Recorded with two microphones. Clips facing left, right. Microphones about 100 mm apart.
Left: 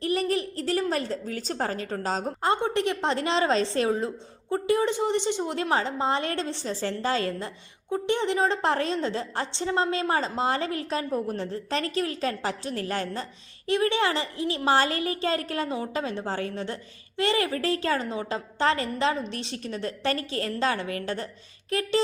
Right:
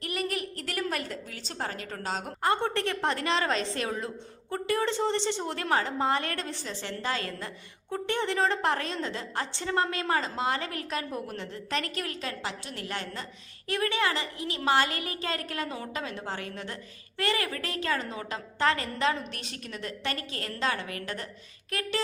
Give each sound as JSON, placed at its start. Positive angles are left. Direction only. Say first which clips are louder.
{"t": 0.0, "sound": "a woman's voice", "louder": "left 7 dB", "side_deg": 30}
{"t": 2.5, "sound": "a woman's voice", "louder": "left 3 dB", "side_deg": 15}
{"t": 7.9, "sound": "a woman's voice", "louder": "left 4 dB", "side_deg": 15}
{"t": 13.7, "sound": "a woman's voice", "louder": "left 4 dB", "side_deg": 25}